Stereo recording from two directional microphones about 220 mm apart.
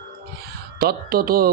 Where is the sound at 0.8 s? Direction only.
45° right (ahead or behind).